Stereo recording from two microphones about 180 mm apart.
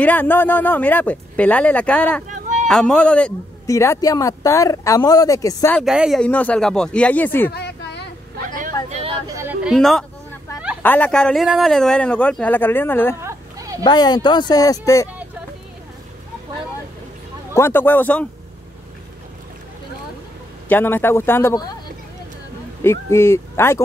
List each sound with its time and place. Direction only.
0.0 s speech: 10° left (ahead or behind)
3.6 s speech: 15° left (ahead or behind)
5.9 s speech: 5° right (ahead or behind)
7.5 s a sound: 70° left (ahead or behind)
8.8 s a sound: 35° right (ahead or behind)
9.3 s a sound: 10° right (ahead or behind)
10.8 s speech: 10° left (ahead or behind)
13.2 s a sound: 15° right (ahead or behind)
13.8 s speech: 25° left (ahead or behind)
17.6 s speech: 10° left (ahead or behind)
20.6 s speech: 10° left (ahead or behind)
22.8 s speech: 15° left (ahead or behind)